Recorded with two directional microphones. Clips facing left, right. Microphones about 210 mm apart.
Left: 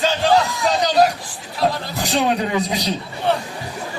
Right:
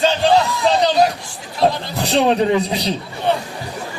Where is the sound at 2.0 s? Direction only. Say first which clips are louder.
Right 4 dB; 30° right (ahead or behind).